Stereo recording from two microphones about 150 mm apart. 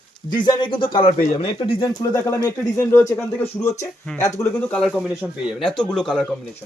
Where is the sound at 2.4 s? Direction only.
20° left (ahead or behind).